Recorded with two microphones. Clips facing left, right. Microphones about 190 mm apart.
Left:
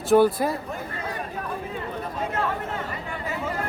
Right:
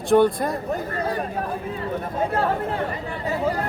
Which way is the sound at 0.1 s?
5° left (ahead or behind).